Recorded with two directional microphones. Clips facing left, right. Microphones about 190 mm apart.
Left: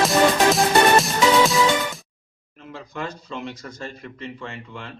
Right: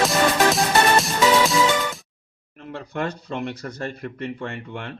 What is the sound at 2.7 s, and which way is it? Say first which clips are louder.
Speech: right 4 dB; 60° right (ahead or behind).